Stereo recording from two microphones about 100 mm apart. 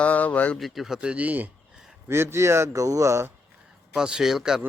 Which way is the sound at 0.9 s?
15° right (ahead or behind).